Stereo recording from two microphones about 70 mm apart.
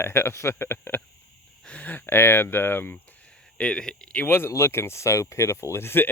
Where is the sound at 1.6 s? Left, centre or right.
Centre.